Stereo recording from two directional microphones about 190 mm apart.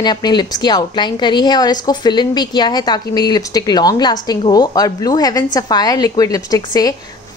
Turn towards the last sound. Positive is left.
turn(degrees=20)  # may be behind; listen again after turning